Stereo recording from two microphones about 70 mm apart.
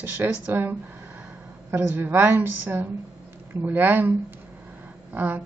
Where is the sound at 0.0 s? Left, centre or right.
Right.